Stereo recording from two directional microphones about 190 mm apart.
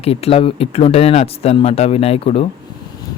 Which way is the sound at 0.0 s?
30° left (ahead or behind).